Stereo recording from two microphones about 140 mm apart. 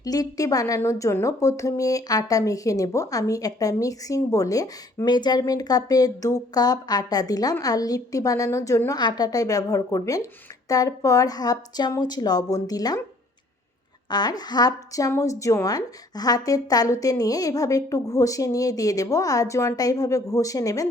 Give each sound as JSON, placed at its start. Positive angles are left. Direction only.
{"t": 0.0, "sound": "a woman's voice", "side_deg": 25}
{"t": 14.1, "sound": "a woman's voice", "side_deg": 30}